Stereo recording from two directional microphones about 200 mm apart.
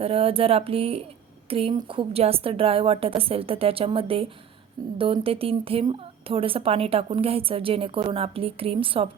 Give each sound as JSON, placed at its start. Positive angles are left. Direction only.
{"t": 0.0, "sound": "a woman's voice", "side_deg": -30}